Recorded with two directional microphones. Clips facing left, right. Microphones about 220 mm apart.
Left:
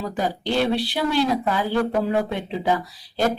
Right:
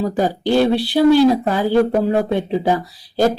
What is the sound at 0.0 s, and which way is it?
Speech, 35° right (ahead or behind).